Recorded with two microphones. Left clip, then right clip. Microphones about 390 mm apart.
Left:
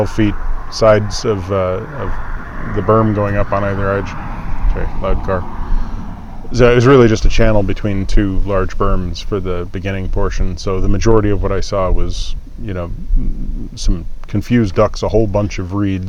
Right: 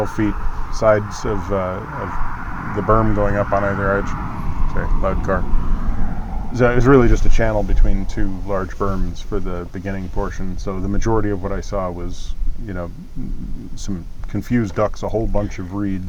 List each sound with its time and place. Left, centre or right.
0.2 s speech: left
2.8 s speech: left
6.5 s speech: left
14.3 s speech: left